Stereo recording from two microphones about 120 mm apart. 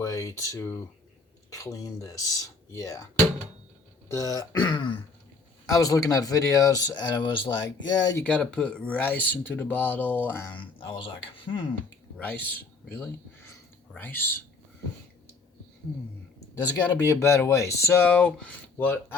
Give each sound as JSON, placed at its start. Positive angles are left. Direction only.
{"t": 0.0, "sound": "speech", "side_deg": 30}
{"t": 4.1, "sound": "speech", "side_deg": 30}
{"t": 4.7, "sound": "throat clearing", "side_deg": 40}
{"t": 5.7, "sound": "speech", "side_deg": 25}
{"t": 8.2, "sound": "speech", "side_deg": 10}
{"t": 10.5, "sound": "speech", "side_deg": 45}
{"t": 12.2, "sound": "speech", "side_deg": 15}
{"t": 16.9, "sound": "speech", "side_deg": 25}